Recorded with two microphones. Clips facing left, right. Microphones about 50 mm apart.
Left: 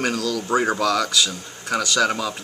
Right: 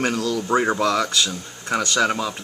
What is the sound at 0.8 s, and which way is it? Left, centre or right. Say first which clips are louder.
Speech: even; right.